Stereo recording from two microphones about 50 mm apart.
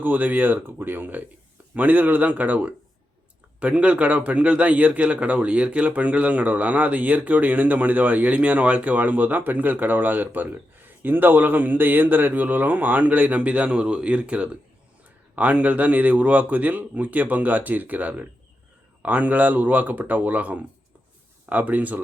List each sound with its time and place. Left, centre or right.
0.0 s speech: right